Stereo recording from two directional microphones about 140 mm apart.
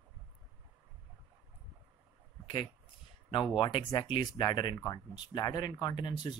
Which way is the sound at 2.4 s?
35° left (ahead or behind).